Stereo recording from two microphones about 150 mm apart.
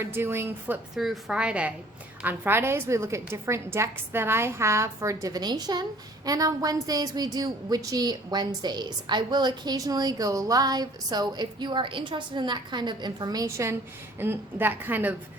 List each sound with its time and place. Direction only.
0.0 s a woman's voice: 15° right (ahead or behind)
0.9 s a woman's voice: centre (ahead or behind)